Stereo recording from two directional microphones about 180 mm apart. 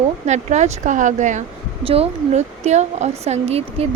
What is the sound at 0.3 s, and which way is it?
A woman's voice, 40° right (ahead or behind).